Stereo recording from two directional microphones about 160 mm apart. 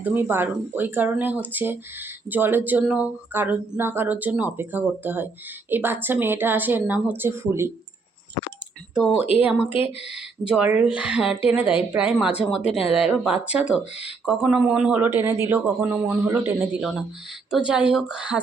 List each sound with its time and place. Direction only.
0.0 s speech: 10° right (ahead or behind)
9.0 s speech: 5° right (ahead or behind)
9.6 s speech: 35° left (ahead or behind)
10.4 s speech: 5° right (ahead or behind)
17.5 s speech: 5° right (ahead or behind)